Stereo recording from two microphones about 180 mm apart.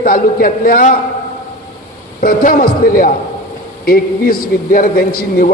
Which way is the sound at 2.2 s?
55° left (ahead or behind).